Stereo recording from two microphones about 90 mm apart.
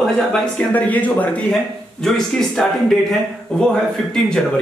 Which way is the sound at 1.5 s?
5° left (ahead or behind).